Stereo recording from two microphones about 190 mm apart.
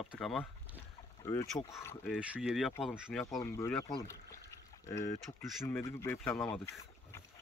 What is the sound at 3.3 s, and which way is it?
Speech, 15° left (ahead or behind).